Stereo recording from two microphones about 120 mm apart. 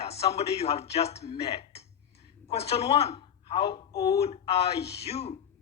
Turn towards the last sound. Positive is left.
turn(degrees=60)  # may be behind; listen again after turning